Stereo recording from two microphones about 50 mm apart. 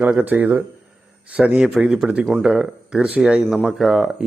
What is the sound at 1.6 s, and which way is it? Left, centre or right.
Speech, centre.